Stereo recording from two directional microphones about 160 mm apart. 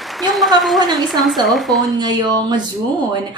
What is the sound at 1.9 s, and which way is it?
Speech, 25° right (ahead or behind).